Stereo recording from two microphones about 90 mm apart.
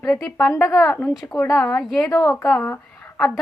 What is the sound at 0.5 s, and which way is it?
Speech, 35° left (ahead or behind).